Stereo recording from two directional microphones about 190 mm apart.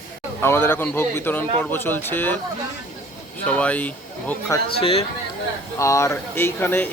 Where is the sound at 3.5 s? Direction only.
10° left (ahead or behind).